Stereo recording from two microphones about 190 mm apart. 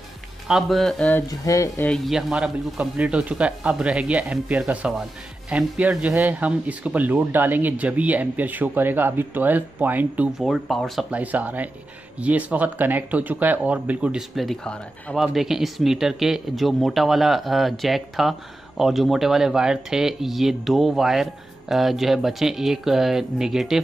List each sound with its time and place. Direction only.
0.5 s speech: centre (ahead or behind)
1.4 s speech: 15° left (ahead or behind)
1.9 s speech: centre (ahead or behind)